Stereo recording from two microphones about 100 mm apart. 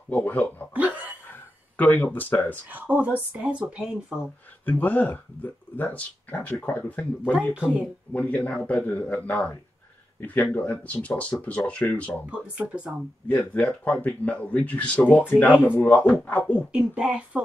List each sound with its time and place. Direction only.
0.1 s speech: 15° left (ahead or behind)
0.7 s hiccup: 15° right (ahead or behind)
1.8 s speech: 15° left (ahead or behind)
2.7 s speech: 15° right (ahead or behind)
4.6 s speech: 20° left (ahead or behind)
7.5 s speech: 10° right (ahead or behind)
8.1 s speech: 15° left (ahead or behind)
12.3 s speech: 10° right (ahead or behind)
13.3 s speech: 15° left (ahead or behind)
16.7 s speech: 10° right (ahead or behind)